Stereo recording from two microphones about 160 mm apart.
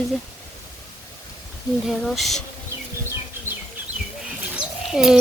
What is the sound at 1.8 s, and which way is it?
Speech, centre (ahead or behind).